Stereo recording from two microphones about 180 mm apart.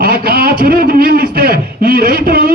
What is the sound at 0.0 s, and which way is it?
A man's voice, 55° right (ahead or behind).